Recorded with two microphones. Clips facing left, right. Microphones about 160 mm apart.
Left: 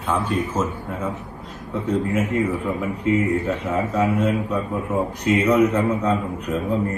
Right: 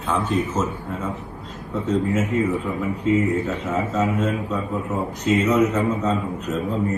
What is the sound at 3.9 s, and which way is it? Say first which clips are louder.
A man's voice: left 3 dB; 15° left (ahead or behind).